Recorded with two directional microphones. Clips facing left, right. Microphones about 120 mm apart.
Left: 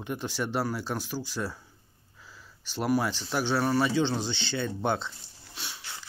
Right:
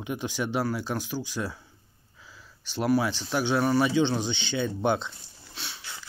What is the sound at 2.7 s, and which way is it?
Speech, 10° left (ahead or behind).